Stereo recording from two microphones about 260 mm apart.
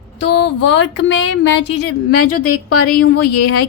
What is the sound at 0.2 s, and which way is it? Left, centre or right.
A woman's voice, left.